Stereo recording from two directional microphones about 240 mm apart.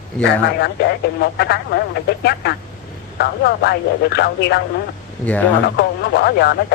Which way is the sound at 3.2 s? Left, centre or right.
Left.